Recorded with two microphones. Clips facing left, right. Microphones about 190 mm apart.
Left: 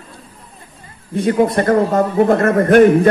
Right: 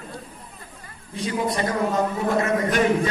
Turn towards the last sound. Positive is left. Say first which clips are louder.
# left 11 dB
turn(degrees=55)  # may be behind; listen again after turning